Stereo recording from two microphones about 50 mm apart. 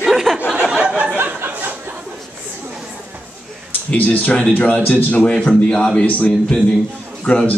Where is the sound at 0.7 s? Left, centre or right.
Right.